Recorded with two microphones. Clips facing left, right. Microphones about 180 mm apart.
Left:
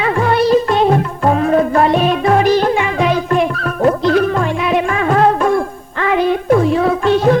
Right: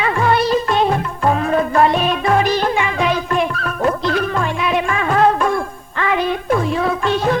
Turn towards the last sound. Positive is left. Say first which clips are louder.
# left 5 dB
turn(degrees=40)  # may be behind; listen again after turning